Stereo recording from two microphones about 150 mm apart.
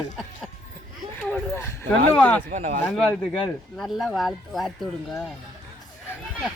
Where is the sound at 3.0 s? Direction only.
Centre (ahead or behind).